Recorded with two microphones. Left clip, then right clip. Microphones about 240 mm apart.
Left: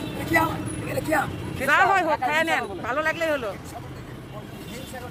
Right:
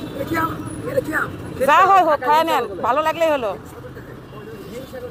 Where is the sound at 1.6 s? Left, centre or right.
Centre.